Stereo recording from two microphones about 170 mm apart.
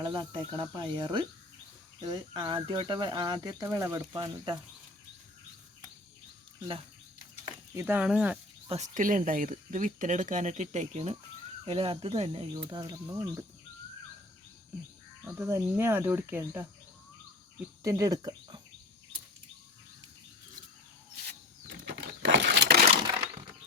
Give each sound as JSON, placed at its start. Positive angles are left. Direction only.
{"t": 0.0, "sound": "speech", "side_deg": -25}
{"t": 7.7, "sound": "speech", "side_deg": -15}
{"t": 8.6, "sound": "speech", "side_deg": -35}
{"t": 9.0, "sound": "speech", "side_deg": -50}
{"t": 12.6, "sound": "speech", "side_deg": -25}
{"t": 15.2, "sound": "speech", "side_deg": -15}
{"t": 21.7, "sound": "a sound", "side_deg": -90}